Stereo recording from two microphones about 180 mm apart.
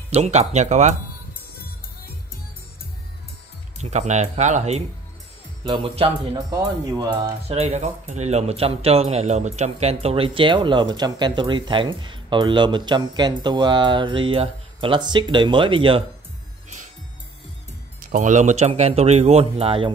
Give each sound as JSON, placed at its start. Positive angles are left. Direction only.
{"t": 0.1, "sound": "speech", "side_deg": -40}
{"t": 3.7, "sound": "speech", "side_deg": -40}
{"t": 7.4, "sound": "speech", "side_deg": -40}
{"t": 18.0, "sound": "speech", "side_deg": -45}